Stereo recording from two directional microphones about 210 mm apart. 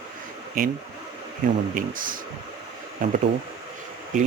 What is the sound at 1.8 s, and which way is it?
Speech, 40° right (ahead or behind).